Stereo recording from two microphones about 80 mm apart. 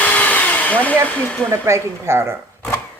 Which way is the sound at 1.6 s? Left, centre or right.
Right.